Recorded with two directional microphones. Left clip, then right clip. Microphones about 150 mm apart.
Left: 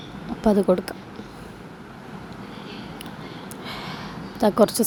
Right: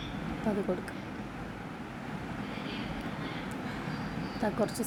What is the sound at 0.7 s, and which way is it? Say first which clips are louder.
Speech: left 14 dB; 45° left (ahead or behind).